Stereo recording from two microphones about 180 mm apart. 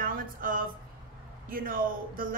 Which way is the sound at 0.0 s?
50° right (ahead or behind).